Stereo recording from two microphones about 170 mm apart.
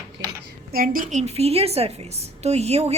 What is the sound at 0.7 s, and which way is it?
A woman's voice, 55° right (ahead or behind).